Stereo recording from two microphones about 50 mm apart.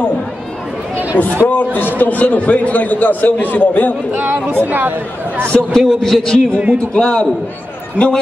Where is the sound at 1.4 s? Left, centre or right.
Left.